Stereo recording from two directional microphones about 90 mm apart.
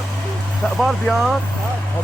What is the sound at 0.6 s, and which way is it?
Speech, 5° left (ahead or behind).